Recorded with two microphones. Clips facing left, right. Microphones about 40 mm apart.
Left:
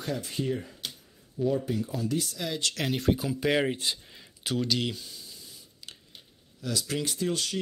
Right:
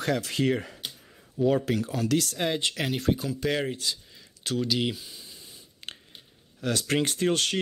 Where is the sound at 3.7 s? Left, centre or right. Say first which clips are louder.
Even; left.